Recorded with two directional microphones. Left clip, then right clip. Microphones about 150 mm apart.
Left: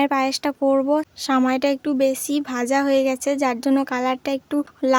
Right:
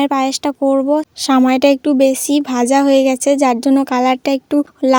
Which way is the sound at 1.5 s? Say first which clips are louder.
Right 9 dB; 40° right (ahead or behind).